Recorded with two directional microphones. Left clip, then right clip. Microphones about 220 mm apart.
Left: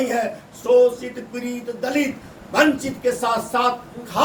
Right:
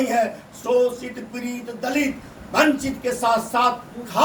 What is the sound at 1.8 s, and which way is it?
A man's voice, 20° left (ahead or behind).